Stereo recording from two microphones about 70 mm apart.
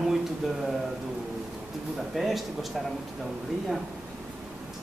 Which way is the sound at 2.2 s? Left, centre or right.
Centre.